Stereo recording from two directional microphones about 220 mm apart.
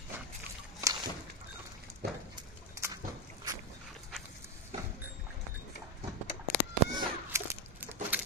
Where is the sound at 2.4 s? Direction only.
15° right (ahead or behind).